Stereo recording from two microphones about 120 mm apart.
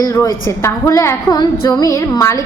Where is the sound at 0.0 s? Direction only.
25° left (ahead or behind).